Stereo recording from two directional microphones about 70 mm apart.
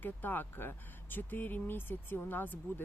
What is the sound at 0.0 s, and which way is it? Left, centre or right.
Speech, left.